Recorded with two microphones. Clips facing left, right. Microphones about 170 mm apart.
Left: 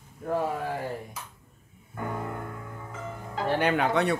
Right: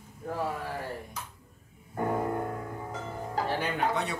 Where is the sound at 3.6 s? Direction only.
70° left (ahead or behind).